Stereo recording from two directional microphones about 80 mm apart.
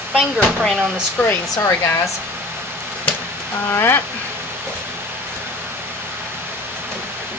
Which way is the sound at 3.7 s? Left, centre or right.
Left.